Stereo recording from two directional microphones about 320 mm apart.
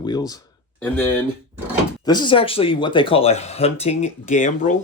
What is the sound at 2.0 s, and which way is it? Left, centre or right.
Speech, centre.